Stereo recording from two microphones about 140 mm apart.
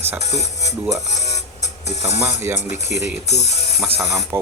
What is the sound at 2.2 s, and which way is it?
Speech, 20° right (ahead or behind).